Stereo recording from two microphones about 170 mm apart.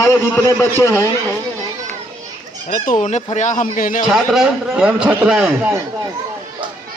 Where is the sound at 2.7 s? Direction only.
50° left (ahead or behind).